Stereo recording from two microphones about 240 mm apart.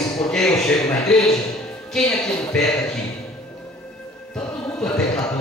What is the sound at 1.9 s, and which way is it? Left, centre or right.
Speech, centre.